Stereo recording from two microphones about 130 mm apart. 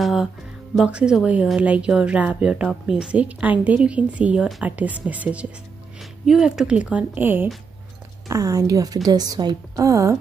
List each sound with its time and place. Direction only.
0.0 s a woman's voice: 5° right (ahead or behind)
8.3 s a woman's voice: 25° right (ahead or behind)